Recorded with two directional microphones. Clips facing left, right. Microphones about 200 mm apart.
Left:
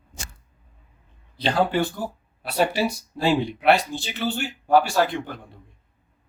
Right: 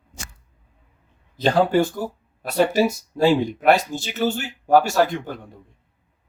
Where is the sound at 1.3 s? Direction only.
45° right (ahead or behind).